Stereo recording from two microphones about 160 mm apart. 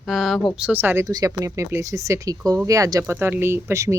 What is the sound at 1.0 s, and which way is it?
Speech, 20° right (ahead or behind).